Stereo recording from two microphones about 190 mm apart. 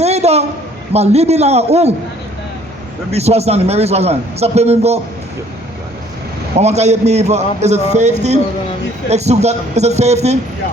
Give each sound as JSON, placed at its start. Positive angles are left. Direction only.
{"t": 0.0, "sound": "a sound", "side_deg": -35}
{"t": 0.9, "sound": "a man's voice", "side_deg": -35}
{"t": 3.1, "sound": "a man's voice", "side_deg": -35}
{"t": 6.6, "sound": "a man's voice", "side_deg": -35}